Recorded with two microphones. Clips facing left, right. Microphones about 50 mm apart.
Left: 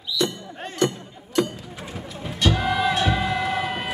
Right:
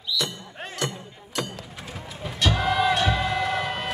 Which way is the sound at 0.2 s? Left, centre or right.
Centre.